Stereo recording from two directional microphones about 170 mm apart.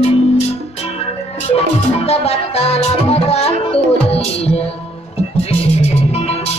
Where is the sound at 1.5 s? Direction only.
35° left (ahead or behind).